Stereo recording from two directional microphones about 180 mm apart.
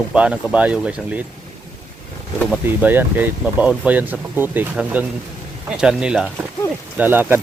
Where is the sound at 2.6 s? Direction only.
10° right (ahead or behind).